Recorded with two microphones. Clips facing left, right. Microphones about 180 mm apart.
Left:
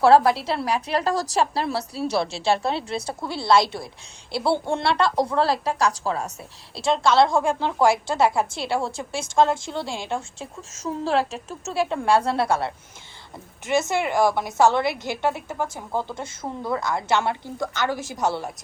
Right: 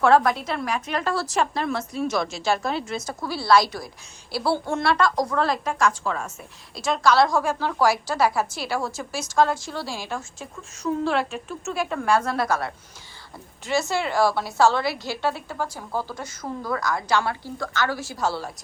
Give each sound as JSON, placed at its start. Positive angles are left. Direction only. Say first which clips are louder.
{"t": 0.0, "sound": "a woman's voice", "louder": "left 2 dB", "side_deg": 35}